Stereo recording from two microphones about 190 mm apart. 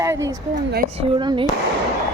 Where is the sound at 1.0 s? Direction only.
25° right (ahead or behind).